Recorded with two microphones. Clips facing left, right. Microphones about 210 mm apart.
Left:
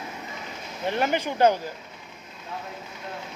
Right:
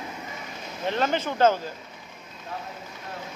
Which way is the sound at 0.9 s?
15° left (ahead or behind).